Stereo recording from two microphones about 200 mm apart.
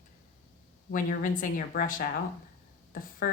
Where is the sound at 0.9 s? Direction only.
40° left (ahead or behind).